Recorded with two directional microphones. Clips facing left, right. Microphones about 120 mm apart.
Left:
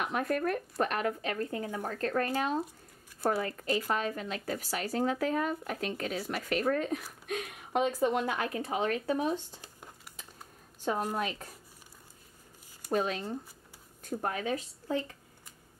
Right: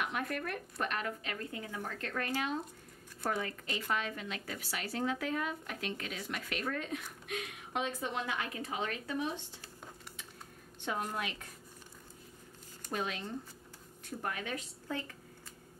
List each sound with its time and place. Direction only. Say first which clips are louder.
0.0 s a woman's voice: left 6 dB; 40° left (ahead or behind)
10.8 s a woman's voice: left 5 dB; 40° left (ahead or behind)
12.9 s a woman's voice: left 7 dB; 40° left (ahead or behind)